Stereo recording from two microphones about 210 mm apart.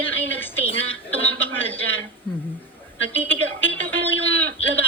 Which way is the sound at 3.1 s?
10° left (ahead or behind).